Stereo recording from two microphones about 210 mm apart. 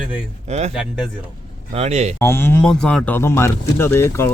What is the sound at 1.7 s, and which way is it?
Speech, 30° right (ahead or behind).